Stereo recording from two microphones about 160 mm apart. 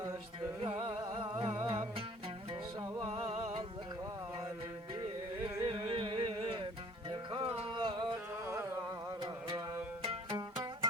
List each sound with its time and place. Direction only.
0.6 s music: 30° right (ahead or behind)
3.1 s music: 40° right (ahead or behind)
5.6 s a sound: 30° right (ahead or behind)
7.1 s music: 35° right (ahead or behind)
8.1 s carnatic music: 15° right (ahead or behind)
9.2 s mantra: 25° right (ahead or behind)
10.0 s music: 40° right (ahead or behind)